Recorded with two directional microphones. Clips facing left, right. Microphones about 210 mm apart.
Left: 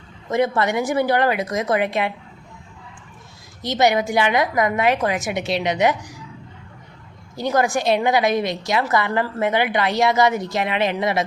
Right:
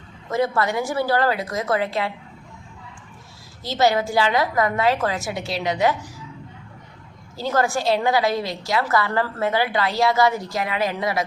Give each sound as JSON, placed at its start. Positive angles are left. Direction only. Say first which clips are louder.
{"t": 0.3, "sound": "a woman's voice", "louder": "left 2 dB", "side_deg": 20}
{"t": 3.6, "sound": "a woman's voice", "louder": "left 1 dB", "side_deg": 20}
{"t": 7.3, "sound": "a woman's voice", "louder": "left 2 dB", "side_deg": 15}